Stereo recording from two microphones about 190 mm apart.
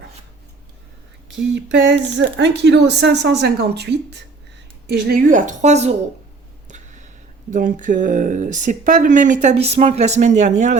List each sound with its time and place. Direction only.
1.5 s a woman's voice: 65° right (ahead or behind); by 5.9 s 35° right (ahead or behind)
6.7 s a sound: 40° right (ahead or behind)
7.5 s speech: 45° right (ahead or behind)